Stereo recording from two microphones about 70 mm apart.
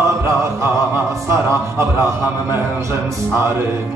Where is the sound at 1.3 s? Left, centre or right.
Right.